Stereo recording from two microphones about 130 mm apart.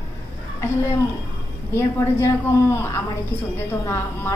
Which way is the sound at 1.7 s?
20° left (ahead or behind).